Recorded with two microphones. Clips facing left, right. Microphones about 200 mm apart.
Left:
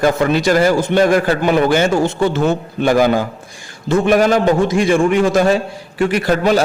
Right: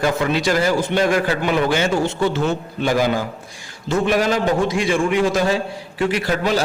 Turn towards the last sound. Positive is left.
turn(degrees=50)  # may be behind; listen again after turning